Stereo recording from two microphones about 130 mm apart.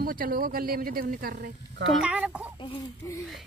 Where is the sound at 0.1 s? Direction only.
90° right.